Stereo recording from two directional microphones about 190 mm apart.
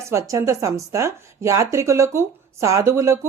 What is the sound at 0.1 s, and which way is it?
Speech, 15° right (ahead or behind).